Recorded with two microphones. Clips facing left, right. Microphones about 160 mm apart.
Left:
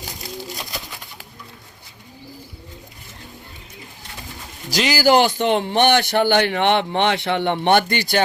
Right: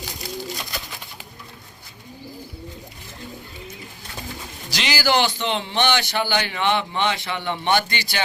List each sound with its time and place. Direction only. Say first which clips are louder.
0.3 s bird: even; centre (ahead or behind)
4.7 s a man's voice: left 6 dB; 40° left (ahead or behind)